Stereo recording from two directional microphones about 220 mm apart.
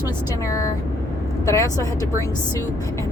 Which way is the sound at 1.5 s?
15° left (ahead or behind).